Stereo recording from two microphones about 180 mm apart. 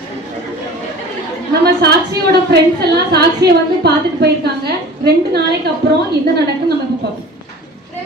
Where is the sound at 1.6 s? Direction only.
65° right (ahead or behind).